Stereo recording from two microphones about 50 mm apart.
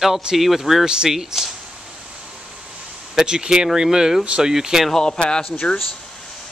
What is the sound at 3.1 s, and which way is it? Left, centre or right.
Speech, centre.